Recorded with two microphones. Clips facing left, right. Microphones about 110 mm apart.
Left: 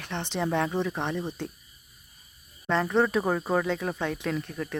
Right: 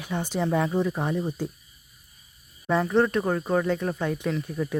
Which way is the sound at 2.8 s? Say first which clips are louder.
Right 1 dB; centre (ahead or behind).